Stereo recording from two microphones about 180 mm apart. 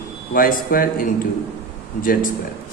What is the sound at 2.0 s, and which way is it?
Speech, 50° left (ahead or behind).